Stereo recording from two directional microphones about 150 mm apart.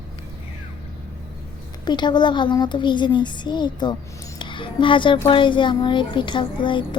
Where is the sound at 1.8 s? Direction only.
30° left (ahead or behind).